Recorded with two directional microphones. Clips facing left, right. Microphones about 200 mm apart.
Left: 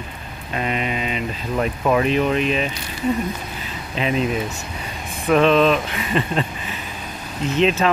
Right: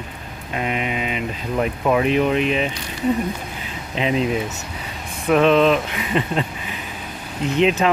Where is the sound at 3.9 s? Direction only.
20° right (ahead or behind).